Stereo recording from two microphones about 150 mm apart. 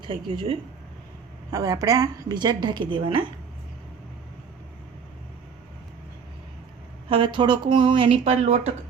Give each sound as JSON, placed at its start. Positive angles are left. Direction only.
{"t": 0.1, "sound": "speech", "side_deg": -35}
{"t": 1.5, "sound": "a woman's voice", "side_deg": -25}
{"t": 7.1, "sound": "speech", "side_deg": -35}